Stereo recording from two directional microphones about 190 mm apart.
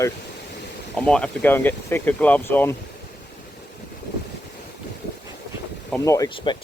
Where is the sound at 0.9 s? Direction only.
5° left (ahead or behind).